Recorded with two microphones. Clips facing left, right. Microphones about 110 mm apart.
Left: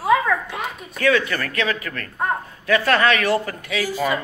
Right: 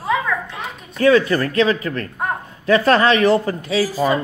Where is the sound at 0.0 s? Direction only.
10° left (ahead or behind).